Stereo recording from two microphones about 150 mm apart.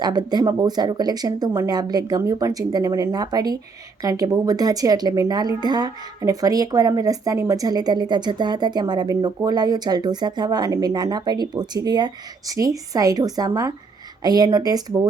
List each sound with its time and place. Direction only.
0.0 s speech: 30° right (ahead or behind)